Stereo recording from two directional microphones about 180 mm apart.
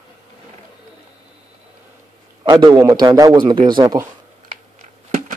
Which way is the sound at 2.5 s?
20° right (ahead or behind).